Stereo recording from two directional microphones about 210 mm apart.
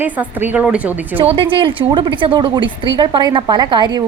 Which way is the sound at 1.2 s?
25° right (ahead or behind).